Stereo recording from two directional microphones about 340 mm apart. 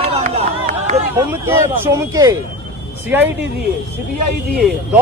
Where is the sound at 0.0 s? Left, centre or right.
Centre.